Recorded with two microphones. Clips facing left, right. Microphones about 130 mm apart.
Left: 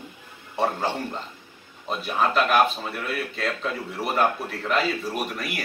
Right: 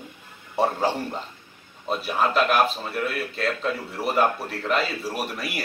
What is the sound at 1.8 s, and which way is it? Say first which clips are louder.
Speech: right 1 dB; centre (ahead or behind).